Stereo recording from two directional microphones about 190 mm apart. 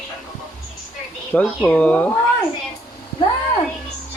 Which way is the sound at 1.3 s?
5° left (ahead or behind).